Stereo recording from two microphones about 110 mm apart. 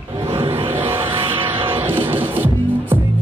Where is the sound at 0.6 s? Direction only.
20° right (ahead or behind).